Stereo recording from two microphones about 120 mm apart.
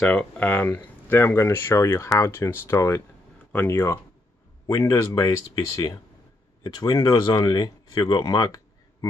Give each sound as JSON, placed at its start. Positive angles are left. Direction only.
{"t": 0.0, "sound": "speech", "side_deg": 10}